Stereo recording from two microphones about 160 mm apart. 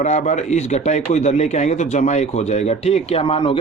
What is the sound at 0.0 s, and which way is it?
A man's voice, 50° left (ahead or behind).